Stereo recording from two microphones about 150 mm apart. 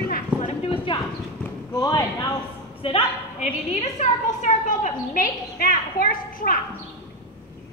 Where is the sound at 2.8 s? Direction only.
45° left (ahead or behind); by 6.6 s 70° left (ahead or behind).